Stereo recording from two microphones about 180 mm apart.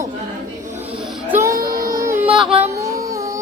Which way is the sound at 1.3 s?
15° right (ahead or behind).